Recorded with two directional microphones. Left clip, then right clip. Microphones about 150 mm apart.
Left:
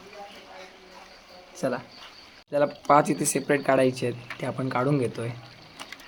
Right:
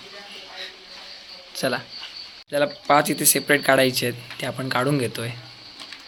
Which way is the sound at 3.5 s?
Centre (ahead or behind).